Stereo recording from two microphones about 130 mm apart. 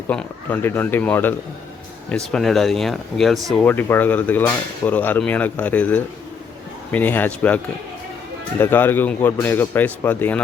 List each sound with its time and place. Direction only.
0.1 s speech: 10° left (ahead or behind)
2.0 s speech: 5° left (ahead or behind)
3.6 s speech: 15° left (ahead or behind)